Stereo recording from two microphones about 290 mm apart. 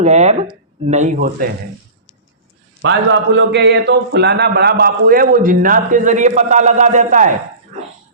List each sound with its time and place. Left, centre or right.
0.0 s a man's voice: right
2.8 s a man's voice: right